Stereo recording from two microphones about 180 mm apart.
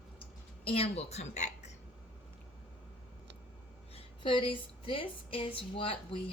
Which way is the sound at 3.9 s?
30° left (ahead or behind).